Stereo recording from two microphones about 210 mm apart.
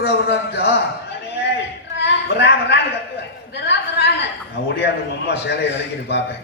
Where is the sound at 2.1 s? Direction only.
55° left (ahead or behind).